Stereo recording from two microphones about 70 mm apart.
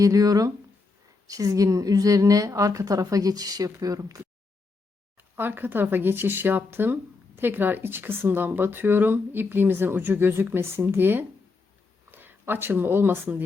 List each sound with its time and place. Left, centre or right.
0.0 s a woman's voice: right
5.4 s speech: right